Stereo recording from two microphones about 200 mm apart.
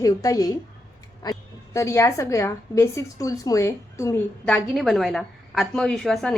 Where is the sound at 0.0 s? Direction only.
15° left (ahead or behind).